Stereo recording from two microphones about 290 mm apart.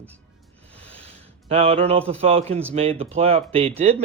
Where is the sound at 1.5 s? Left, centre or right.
Centre.